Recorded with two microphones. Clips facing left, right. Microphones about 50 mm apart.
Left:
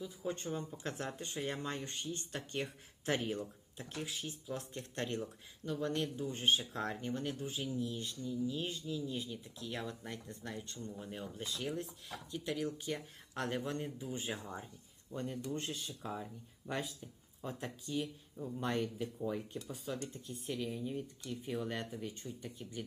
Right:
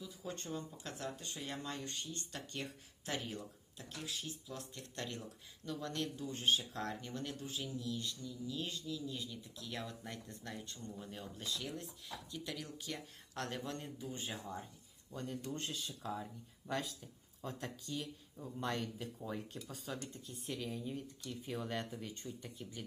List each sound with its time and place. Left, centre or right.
0.0 s speech: left
5.6 s speech: left
9.6 s speech: centre
17.4 s speech: centre
18.3 s speech: centre
19.2 s speech: centre